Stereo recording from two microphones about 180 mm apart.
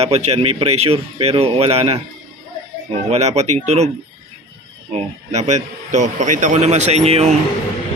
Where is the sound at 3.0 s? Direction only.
35° right (ahead or behind).